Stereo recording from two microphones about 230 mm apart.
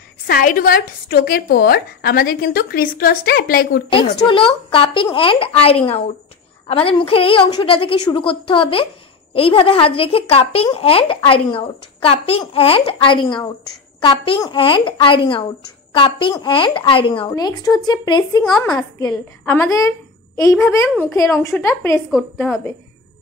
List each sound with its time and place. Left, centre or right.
0.3 s speech: left
3.9 s a woman's voice: left